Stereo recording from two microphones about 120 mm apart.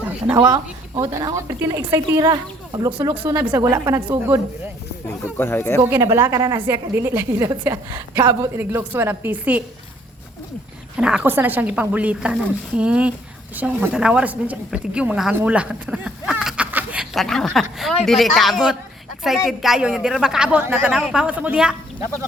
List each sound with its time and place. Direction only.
0.3 s a woman's voice: 30° right (ahead or behind)
5.4 s speech: 20° left (ahead or behind)
5.8 s a woman's voice: 25° right (ahead or behind)
10.9 s a woman's voice: 10° right (ahead or behind)
16.7 s a sound: 10° right (ahead or behind)
17.2 s a woman's voice: 5° left (ahead or behind)